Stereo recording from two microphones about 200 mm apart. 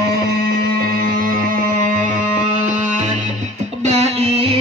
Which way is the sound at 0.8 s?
45° right (ahead or behind).